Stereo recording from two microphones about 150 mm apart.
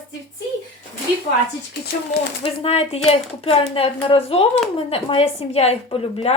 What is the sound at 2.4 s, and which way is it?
A woman's voice, 40° left (ahead or behind).